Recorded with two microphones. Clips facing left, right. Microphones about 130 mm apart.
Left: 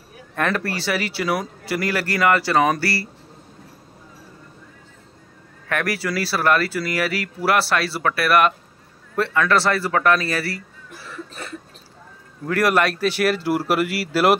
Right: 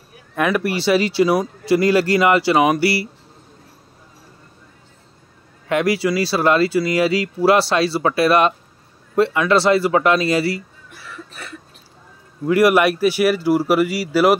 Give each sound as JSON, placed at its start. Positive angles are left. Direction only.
{"t": 0.4, "sound": "speech", "side_deg": -10}
{"t": 5.7, "sound": "speech", "side_deg": -20}
{"t": 12.4, "sound": "speech", "side_deg": -10}